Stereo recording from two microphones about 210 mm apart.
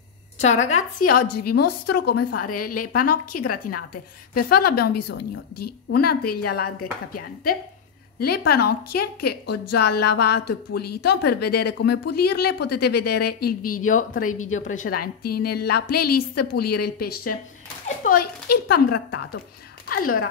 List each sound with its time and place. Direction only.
0.4 s a woman's voice: 30° left (ahead or behind); by 19.4 s 50° left (ahead or behind)